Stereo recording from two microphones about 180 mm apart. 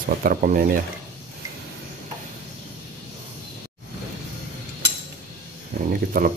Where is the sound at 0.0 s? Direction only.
50° right (ahead or behind).